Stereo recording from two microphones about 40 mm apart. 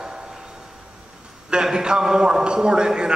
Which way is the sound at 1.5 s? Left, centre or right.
Centre.